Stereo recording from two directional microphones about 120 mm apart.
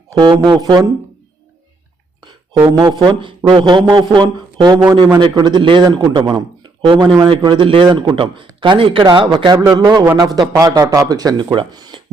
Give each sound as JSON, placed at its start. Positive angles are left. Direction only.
{"t": 0.2, "sound": "speech", "side_deg": -40}
{"t": 2.6, "sound": "speech", "side_deg": -35}